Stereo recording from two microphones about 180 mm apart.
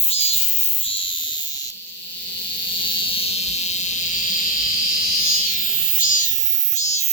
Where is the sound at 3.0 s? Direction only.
30° left (ahead or behind).